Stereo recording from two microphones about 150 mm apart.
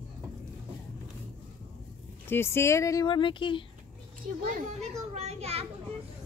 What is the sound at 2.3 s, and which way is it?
Speech, 15° left (ahead or behind).